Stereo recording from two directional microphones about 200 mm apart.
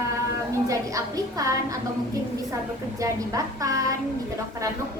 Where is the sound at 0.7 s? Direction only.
15° right (ahead or behind).